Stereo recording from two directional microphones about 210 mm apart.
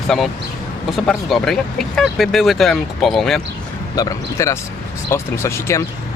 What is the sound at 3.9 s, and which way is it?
Speech, 15° left (ahead or behind).